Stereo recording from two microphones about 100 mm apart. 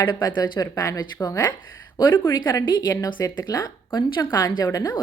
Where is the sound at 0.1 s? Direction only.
45° left (ahead or behind).